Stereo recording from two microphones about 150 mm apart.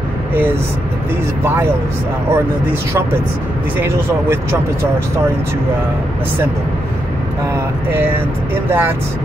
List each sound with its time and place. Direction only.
2.3 s speech: 15° right (ahead or behind)
7.9 s speech: 15° right (ahead or behind)